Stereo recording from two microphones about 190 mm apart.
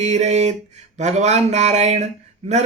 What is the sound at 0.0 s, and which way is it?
Speech, 35° right (ahead or behind).